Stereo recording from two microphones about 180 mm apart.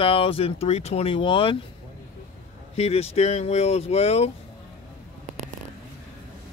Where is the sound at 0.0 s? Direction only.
30° left (ahead or behind).